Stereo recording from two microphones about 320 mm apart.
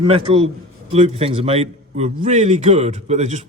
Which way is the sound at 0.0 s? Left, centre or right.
Centre.